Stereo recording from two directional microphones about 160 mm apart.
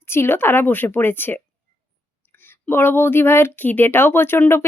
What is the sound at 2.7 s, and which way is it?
Speech, 15° left (ahead or behind).